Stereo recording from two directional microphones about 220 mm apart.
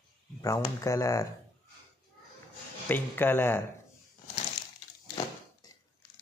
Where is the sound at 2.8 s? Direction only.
10° left (ahead or behind).